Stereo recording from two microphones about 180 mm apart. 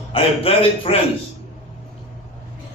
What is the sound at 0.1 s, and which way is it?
Speech, 30° left (ahead or behind).